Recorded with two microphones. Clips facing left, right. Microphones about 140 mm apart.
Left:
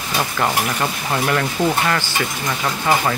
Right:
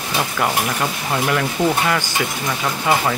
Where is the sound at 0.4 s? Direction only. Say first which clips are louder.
Even; 5° right (ahead or behind).